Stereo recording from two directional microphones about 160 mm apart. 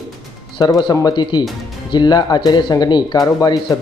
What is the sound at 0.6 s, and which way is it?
Speech, 20° left (ahead or behind).